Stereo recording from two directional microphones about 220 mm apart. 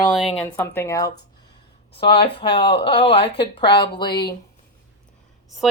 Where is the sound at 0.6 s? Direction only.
10° left (ahead or behind).